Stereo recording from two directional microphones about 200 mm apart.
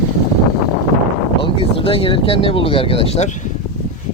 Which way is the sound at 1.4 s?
25° left (ahead or behind).